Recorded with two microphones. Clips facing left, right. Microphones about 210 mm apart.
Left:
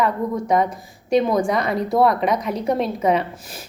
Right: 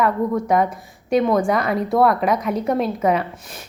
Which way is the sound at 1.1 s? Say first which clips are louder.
Right 1 dB; 5° right (ahead or behind).